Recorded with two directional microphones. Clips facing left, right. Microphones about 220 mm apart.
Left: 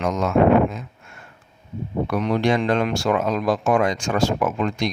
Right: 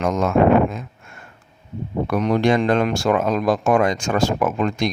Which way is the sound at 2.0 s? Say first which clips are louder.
Right 3 dB; 45° right (ahead or behind).